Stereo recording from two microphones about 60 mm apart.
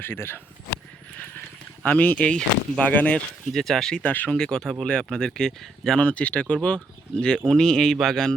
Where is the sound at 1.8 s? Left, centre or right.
Left.